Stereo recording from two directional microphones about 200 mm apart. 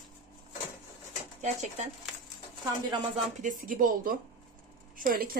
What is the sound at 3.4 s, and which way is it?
Speech, 40° right (ahead or behind).